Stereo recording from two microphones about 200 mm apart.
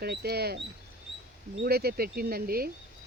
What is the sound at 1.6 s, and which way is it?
Speech, 50° right (ahead or behind).